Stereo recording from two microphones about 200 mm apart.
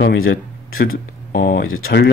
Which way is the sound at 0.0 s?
70° left (ahead or behind).